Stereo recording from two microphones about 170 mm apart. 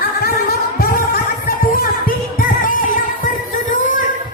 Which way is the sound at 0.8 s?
60° left (ahead or behind).